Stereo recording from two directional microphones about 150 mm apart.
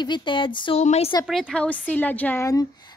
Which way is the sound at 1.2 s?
Centre (ahead or behind).